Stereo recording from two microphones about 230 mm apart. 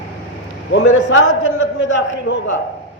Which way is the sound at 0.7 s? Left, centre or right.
Left.